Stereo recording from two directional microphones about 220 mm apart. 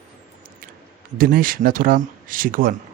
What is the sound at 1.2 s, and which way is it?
Speech, 40° right (ahead or behind).